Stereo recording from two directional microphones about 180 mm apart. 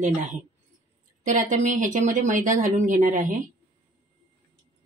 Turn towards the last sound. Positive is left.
turn(degrees=-50)  # may be behind; listen again after turning